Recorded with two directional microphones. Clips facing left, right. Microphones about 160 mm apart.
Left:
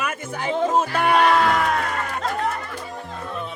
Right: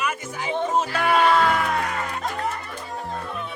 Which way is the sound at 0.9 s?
60° left (ahead or behind).